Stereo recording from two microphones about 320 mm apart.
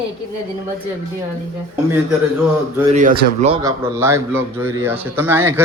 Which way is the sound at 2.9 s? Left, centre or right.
Right.